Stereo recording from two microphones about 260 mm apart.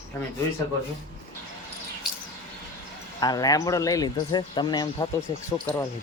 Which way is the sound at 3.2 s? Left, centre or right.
Centre.